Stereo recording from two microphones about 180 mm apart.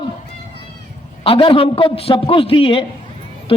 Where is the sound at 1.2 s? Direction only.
30° left (ahead or behind).